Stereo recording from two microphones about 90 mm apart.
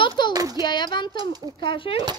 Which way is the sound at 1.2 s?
45° right (ahead or behind).